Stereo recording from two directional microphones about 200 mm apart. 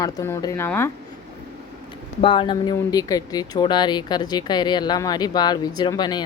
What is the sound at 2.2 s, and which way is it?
Speech, 25° left (ahead or behind).